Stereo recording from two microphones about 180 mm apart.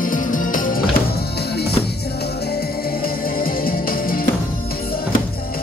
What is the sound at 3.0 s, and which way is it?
Music, 55° left (ahead or behind).